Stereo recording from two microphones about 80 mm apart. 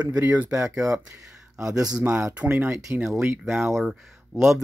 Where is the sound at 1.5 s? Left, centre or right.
Right.